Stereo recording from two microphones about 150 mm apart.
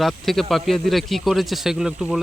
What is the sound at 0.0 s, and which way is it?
Speech, centre (ahead or behind).